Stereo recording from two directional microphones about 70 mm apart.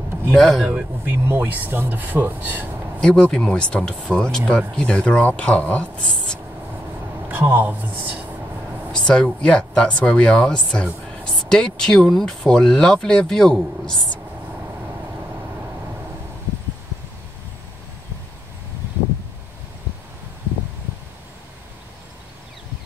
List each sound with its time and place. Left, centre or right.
0.3 s speech: centre
1.0 s speech: right
3.0 s speech: centre
7.2 s speech: right
8.9 s speech: centre